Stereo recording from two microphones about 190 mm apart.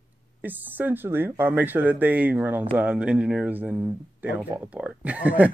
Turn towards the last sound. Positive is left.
turn(degrees=-5)  # may be behind; listen again after turning